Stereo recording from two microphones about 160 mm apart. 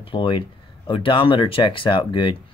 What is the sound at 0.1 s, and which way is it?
Speech, 30° left (ahead or behind).